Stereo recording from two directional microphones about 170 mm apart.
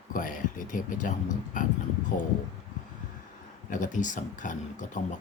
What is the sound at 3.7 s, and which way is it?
Speech, 50° left (ahead or behind).